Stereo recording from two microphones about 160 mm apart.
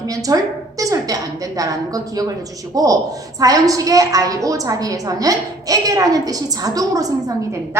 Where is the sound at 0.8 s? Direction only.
20° right (ahead or behind).